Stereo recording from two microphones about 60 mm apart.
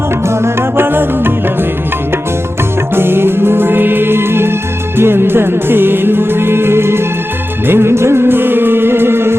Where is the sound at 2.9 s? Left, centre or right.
Right.